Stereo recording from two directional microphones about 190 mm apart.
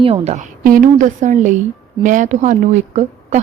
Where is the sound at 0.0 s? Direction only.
35° right (ahead or behind).